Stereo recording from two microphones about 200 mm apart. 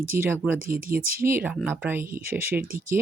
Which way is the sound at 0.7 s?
45° right (ahead or behind).